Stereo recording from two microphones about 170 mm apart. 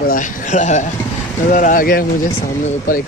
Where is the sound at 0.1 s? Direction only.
45° left (ahead or behind).